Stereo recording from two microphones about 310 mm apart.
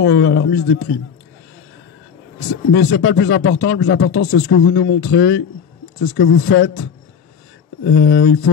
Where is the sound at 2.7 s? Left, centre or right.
Left.